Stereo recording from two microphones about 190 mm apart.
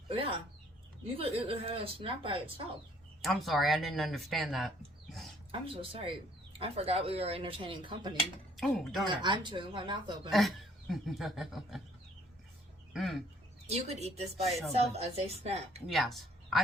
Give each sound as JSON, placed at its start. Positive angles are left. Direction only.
{"t": 0.1, "sound": "speech", "side_deg": -25}
{"t": 3.2, "sound": "speech", "side_deg": 0}
{"t": 5.5, "sound": "speech", "side_deg": -30}
{"t": 8.5, "sound": "speech", "side_deg": 0}
{"t": 9.0, "sound": "speech", "side_deg": -25}
{"t": 10.3, "sound": "speech", "side_deg": 0}
{"t": 12.9, "sound": "chicken", "side_deg": 0}
{"t": 13.7, "sound": "speech", "side_deg": -35}
{"t": 15.9, "sound": "speech", "side_deg": 0}